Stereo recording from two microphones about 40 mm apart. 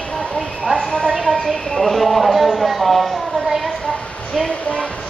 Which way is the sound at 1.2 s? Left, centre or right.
Centre.